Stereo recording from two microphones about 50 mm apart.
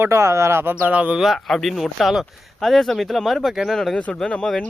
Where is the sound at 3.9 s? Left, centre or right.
Centre.